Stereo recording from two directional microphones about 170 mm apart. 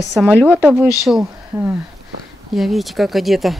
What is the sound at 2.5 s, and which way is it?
Speech, centre (ahead or behind).